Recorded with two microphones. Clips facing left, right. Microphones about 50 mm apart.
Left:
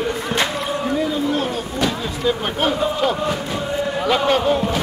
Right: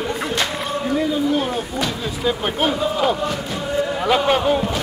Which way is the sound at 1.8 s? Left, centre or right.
Centre.